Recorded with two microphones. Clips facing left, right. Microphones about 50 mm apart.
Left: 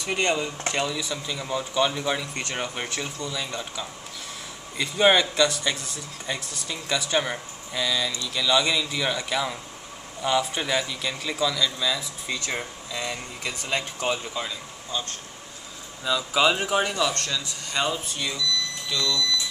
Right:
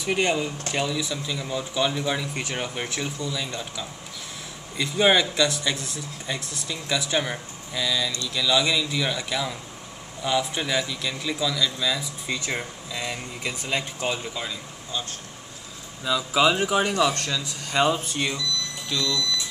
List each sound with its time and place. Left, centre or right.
0.0 s a man's voice: centre
16.9 s speech: centre
17.9 s speech: right
18.9 s speech: centre